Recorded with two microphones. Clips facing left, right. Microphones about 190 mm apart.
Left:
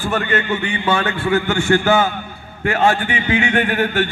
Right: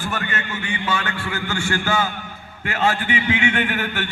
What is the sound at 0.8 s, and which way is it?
A man's voice, 60° left (ahead or behind).